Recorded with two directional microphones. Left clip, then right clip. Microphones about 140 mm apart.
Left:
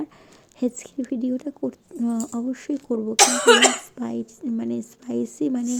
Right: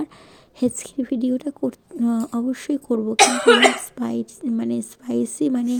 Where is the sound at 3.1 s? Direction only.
15° left (ahead or behind).